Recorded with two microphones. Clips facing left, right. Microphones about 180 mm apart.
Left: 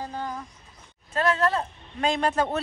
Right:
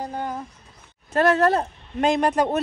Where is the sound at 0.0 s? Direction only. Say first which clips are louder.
Right 4 dB; 15° right (ahead or behind).